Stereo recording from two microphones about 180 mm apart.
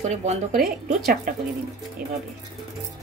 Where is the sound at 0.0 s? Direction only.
40° right (ahead or behind).